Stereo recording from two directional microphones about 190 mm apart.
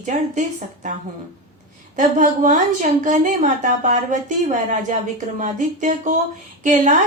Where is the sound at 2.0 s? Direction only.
40° right (ahead or behind).